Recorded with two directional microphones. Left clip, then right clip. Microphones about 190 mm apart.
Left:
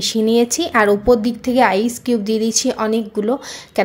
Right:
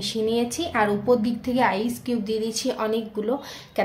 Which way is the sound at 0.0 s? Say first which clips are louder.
Left 8 dB; 50° left (ahead or behind).